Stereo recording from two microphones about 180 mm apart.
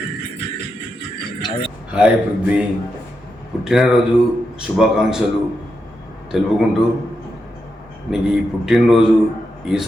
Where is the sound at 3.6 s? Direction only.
5° right (ahead or behind).